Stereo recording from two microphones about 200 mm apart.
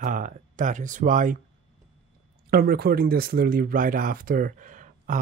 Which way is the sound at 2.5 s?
50° right (ahead or behind).